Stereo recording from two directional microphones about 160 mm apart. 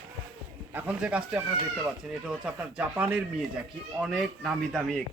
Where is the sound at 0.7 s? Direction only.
5° right (ahead or behind).